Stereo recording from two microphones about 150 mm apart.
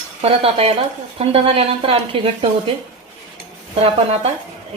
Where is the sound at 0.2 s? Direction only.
40° right (ahead or behind).